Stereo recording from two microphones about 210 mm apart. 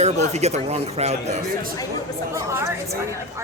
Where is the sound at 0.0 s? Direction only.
30° right (ahead or behind).